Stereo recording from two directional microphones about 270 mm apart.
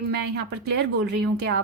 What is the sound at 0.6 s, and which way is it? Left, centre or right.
Speech, right.